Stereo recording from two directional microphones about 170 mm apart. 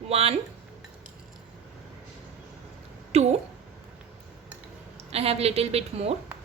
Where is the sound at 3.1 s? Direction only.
40° right (ahead or behind).